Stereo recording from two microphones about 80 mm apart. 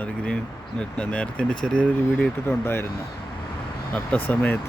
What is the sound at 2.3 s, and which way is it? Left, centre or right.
Speech, left.